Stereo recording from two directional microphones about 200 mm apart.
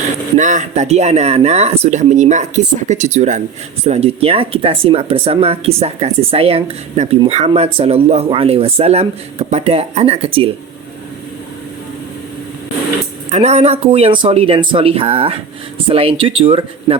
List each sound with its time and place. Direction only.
0.3 s speech: 40° right (ahead or behind)
13.3 s speech: 35° right (ahead or behind)